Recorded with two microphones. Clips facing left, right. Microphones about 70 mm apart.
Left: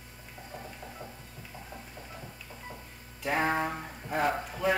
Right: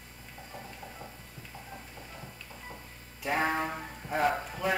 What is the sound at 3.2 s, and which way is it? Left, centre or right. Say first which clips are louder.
Speech: left 1 dB; centre.